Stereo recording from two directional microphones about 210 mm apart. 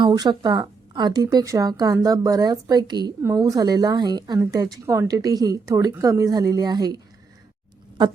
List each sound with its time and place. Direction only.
0.0 s a woman's voice: 20° right (ahead or behind)